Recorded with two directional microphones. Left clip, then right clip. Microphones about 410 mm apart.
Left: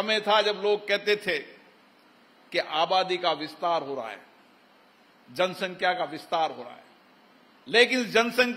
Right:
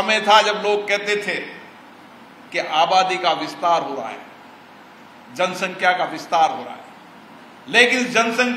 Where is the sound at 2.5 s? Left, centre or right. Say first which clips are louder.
Right 8 dB; centre.